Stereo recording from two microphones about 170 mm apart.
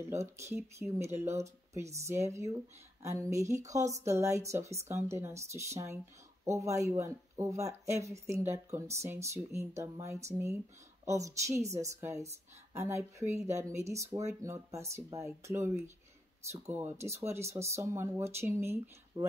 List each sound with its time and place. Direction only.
0.1 s a woman's voice: 15° right (ahead or behind)